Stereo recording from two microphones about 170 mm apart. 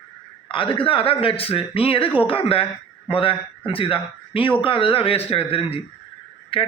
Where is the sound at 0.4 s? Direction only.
30° left (ahead or behind).